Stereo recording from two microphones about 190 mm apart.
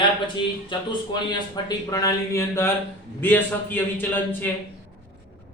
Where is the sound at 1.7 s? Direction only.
20° left (ahead or behind).